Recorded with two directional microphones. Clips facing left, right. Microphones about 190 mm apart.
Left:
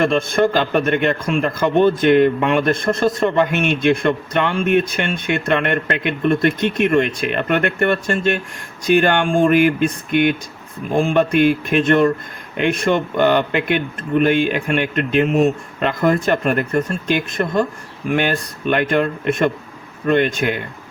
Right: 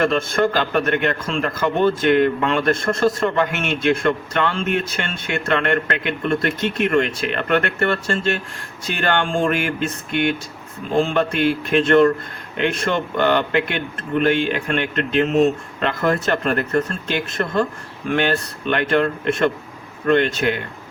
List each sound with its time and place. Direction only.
0.0 s a man's voice: 20° left (ahead or behind)